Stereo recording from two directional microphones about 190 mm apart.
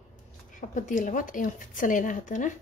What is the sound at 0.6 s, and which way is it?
A woman's voice, 45° left (ahead or behind).